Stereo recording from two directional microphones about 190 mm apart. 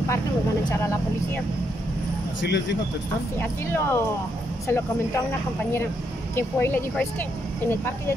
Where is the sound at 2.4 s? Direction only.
65° left (ahead or behind).